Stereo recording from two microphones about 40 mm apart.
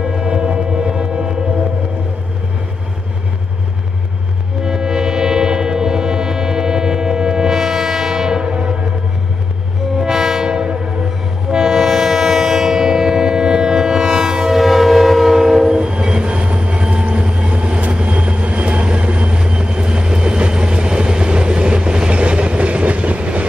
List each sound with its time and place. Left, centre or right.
0.1 s a sound: centre
4.6 s music: centre
9.9 s train: centre; by 23.4 s right